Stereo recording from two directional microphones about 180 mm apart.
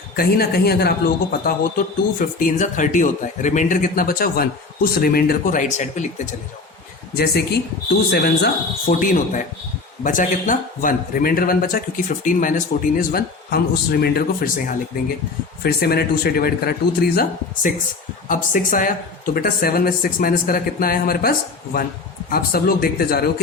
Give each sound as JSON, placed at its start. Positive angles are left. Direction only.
{"t": 0.2, "sound": "speech", "side_deg": 60}
{"t": 2.1, "sound": "a man's voice", "side_deg": 45}
{"t": 7.1, "sound": "a man's voice", "side_deg": 60}